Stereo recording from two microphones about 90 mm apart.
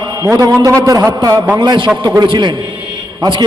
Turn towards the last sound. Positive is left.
turn(degrees=-60)  # may be behind; listen again after turning